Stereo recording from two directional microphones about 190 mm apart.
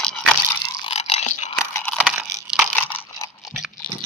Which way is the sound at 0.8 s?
30° left (ahead or behind).